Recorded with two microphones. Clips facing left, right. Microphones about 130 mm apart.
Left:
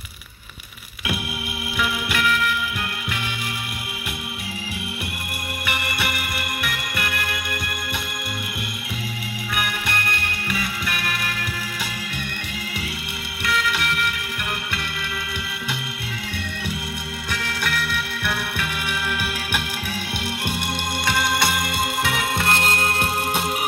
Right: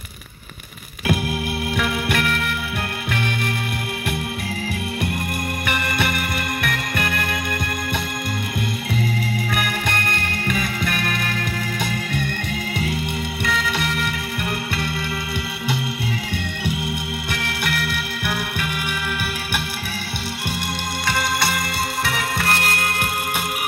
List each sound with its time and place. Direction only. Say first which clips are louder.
1.8 s music: even; 40° right (ahead or behind)
5.7 s music: right 3 dB; 40° right (ahead or behind)
9.6 s music: right 2 dB; 45° right (ahead or behind)
13.4 s music: left 1 dB; 40° right (ahead or behind)
22.0 s music: even; 20° left (ahead or behind)